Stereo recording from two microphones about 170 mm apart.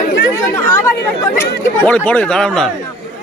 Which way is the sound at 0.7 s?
15° left (ahead or behind).